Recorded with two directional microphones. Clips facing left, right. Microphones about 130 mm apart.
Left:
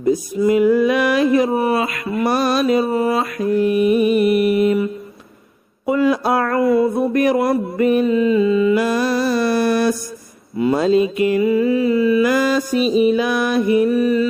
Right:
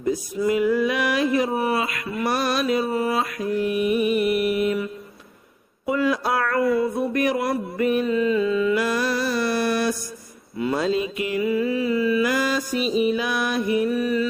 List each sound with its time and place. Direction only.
0.5 s a sound: 30° left (ahead or behind)
0.8 s mantra: 45° left (ahead or behind); by 4.8 s 25° left (ahead or behind)
5.9 s speech: 30° left (ahead or behind)
7.1 s mantra: 40° left (ahead or behind)
8.2 s mantra: 10° left (ahead or behind)
8.7 s mantra: 25° left (ahead or behind); by 9.9 s 45° left (ahead or behind)
10.6 s mantra: 30° left (ahead or behind)
13.1 s music: 45° left (ahead or behind)
13.6 s music: 55° left (ahead or behind)
13.9 s mantra: 35° left (ahead or behind)